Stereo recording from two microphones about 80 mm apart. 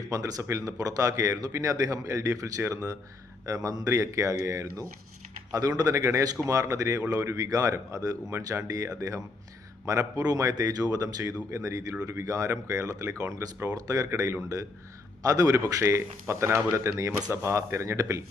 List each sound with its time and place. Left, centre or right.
0.0 s speech: right
5.9 s speech: right
8.3 s speech: right
15.2 s speech: right
15.6 s speech: right